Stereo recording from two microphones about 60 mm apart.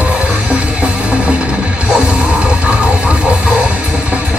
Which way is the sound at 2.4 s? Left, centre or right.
Centre.